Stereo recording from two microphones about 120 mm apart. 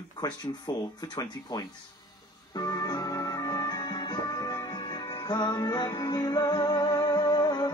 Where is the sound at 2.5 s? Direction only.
35° left (ahead or behind).